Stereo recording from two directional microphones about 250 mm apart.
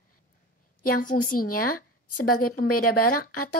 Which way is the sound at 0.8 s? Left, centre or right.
Left.